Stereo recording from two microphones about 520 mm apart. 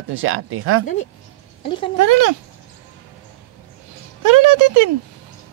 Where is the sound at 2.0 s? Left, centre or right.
Right.